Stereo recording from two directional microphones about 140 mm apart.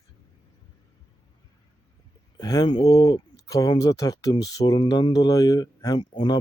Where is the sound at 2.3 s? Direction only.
30° left (ahead or behind).